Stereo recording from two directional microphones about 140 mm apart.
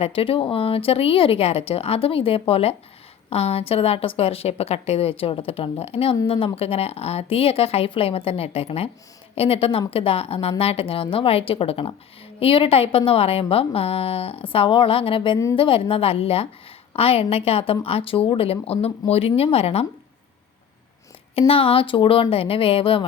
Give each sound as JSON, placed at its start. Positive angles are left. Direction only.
{"t": 0.0, "sound": "a woman's voice", "side_deg": 40}
{"t": 21.3, "sound": "a woman's voice", "side_deg": 45}